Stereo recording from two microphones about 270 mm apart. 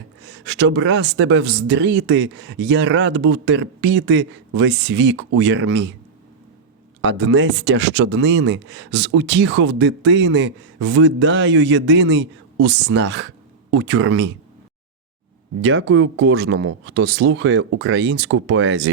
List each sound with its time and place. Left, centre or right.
0.2 s speech: right
7.0 s speech: right
15.6 s speech: right